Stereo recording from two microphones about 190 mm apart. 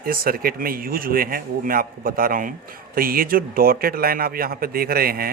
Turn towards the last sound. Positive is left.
turn(degrees=-50)  # may be behind; listen again after turning